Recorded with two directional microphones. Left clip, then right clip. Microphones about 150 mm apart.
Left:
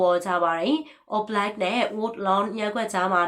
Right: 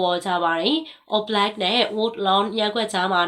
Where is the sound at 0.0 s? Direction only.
20° right (ahead or behind).